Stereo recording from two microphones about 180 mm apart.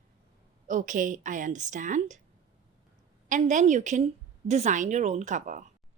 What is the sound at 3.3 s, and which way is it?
A woman's voice, 45° right (ahead or behind).